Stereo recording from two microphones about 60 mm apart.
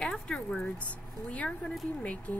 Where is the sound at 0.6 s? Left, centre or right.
Left.